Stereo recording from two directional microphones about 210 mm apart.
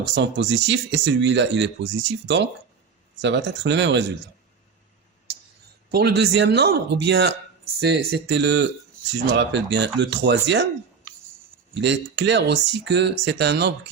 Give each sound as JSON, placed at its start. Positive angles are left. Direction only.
{"t": 0.0, "sound": "speech", "side_deg": -55}
{"t": 5.9, "sound": "speech", "side_deg": -50}
{"t": 11.7, "sound": "speech", "side_deg": -60}